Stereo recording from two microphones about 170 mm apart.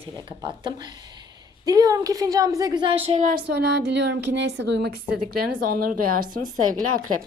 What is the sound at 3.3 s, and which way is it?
A woman's voice, 70° right (ahead or behind).